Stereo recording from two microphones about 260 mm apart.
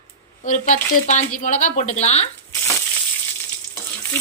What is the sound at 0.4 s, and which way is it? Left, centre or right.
A woman's voice, left.